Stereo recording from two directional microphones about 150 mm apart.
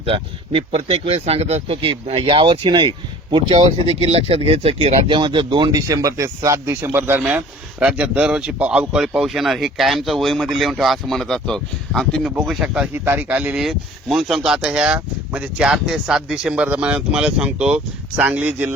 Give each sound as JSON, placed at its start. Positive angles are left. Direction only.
{"t": 0.0, "sound": "speech", "side_deg": -40}